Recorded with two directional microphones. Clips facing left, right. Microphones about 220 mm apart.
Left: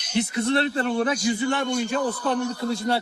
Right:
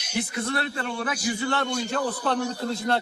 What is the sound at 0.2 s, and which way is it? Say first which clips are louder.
Speech: left 6 dB; 25° left (ahead or behind).